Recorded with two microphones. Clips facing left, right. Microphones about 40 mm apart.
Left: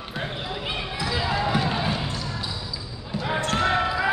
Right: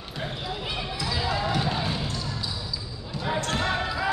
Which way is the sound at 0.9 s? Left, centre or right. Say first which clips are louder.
Left 3 dB; centre.